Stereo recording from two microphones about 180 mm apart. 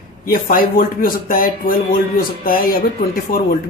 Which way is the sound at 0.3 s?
55° left (ahead or behind).